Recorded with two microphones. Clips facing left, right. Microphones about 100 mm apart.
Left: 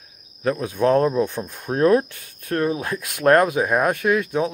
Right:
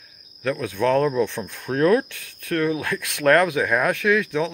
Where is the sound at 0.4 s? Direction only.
30° left (ahead or behind).